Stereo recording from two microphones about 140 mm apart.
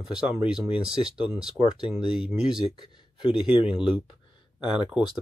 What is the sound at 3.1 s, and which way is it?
Speech, 40° left (ahead or behind).